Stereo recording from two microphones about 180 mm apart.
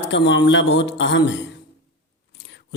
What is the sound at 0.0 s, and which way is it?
A man's voice, 75° left (ahead or behind).